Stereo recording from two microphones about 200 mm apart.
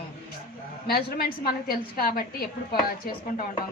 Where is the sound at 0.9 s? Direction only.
50° left (ahead or behind).